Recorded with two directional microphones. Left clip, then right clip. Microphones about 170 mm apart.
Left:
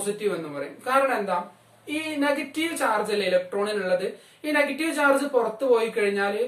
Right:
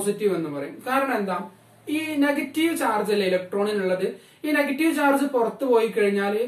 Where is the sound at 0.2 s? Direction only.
15° left (ahead or behind).